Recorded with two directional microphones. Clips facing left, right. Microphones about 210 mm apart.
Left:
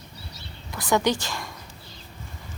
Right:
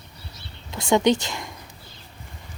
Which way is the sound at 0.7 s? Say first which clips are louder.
Right 4 dB; 25° right (ahead or behind).